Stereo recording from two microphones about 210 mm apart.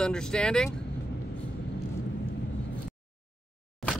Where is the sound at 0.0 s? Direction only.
5° left (ahead or behind).